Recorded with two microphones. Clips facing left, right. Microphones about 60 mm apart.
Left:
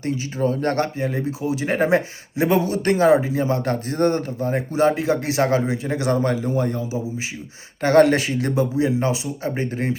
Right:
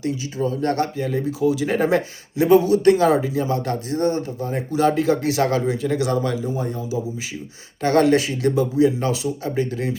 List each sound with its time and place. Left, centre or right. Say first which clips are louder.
0.0 s speech: left 1 dB; left
7.8 s speech: left 2 dB; left